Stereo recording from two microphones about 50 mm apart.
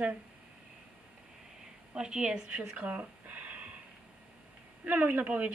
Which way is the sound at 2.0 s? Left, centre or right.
Centre.